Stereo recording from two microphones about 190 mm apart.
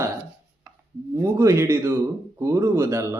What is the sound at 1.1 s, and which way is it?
A man's voice, 15° right (ahead or behind).